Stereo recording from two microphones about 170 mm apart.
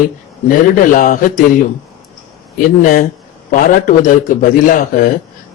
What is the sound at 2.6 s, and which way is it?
A man's voice, 55° left (ahead or behind).